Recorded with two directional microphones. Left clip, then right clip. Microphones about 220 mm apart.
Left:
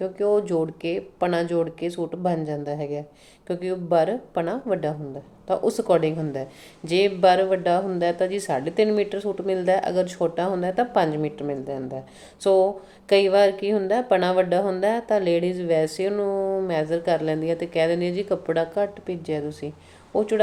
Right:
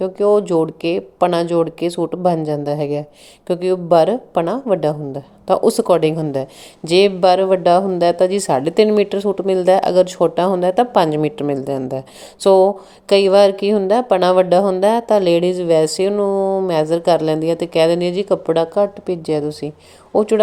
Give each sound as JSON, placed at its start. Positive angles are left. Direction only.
{"t": 0.0, "sound": "a woman's voice", "side_deg": -30}
{"t": 16.3, "sound": "speech", "side_deg": -15}
{"t": 16.6, "sound": "a woman's voice", "side_deg": -30}